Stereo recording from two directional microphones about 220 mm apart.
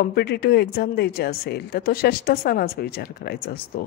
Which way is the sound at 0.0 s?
45° left (ahead or behind).